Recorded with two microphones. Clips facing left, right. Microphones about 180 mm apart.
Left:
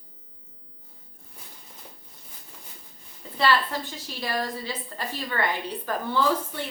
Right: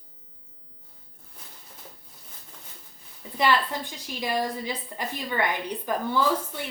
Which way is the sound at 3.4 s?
15° right (ahead or behind).